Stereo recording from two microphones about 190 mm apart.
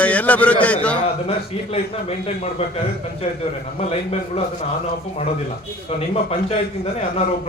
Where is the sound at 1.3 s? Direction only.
30° left (ahead or behind).